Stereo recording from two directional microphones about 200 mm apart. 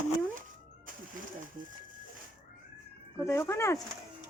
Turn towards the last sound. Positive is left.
turn(degrees=15)  # may be behind; listen again after turning